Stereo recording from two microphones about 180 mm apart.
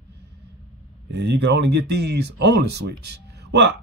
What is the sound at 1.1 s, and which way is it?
Speech, 70° right (ahead or behind).